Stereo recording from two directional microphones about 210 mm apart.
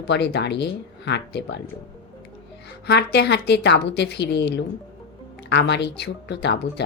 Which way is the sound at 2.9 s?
50° left (ahead or behind).